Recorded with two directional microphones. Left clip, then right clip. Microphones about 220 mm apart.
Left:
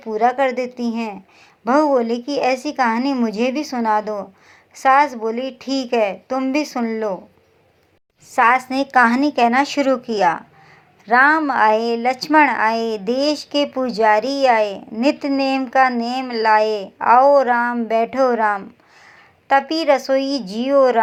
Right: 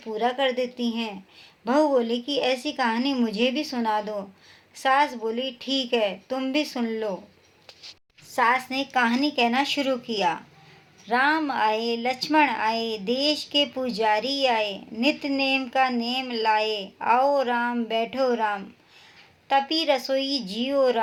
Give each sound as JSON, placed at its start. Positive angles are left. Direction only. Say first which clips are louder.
{"t": 0.0, "sound": "speech", "louder": "left 7 dB", "side_deg": 25}
{"t": 8.4, "sound": "speech", "louder": "left 7 dB", "side_deg": 30}
{"t": 20.1, "sound": "speech", "louder": "left 7 dB", "side_deg": 25}